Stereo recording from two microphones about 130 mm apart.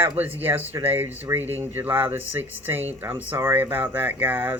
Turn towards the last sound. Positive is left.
turn(degrees=-15)  # may be behind; listen again after turning